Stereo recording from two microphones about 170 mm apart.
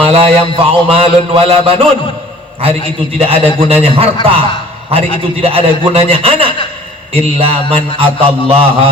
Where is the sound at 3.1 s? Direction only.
35° right (ahead or behind).